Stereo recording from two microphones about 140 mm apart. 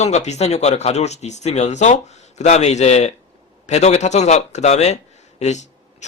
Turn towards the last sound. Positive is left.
turn(degrees=55)  # may be behind; listen again after turning